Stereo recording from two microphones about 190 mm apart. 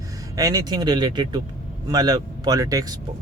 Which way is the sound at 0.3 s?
20° right (ahead or behind).